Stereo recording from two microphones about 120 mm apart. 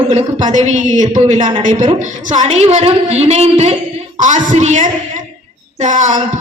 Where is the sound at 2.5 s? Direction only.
65° right (ahead or behind).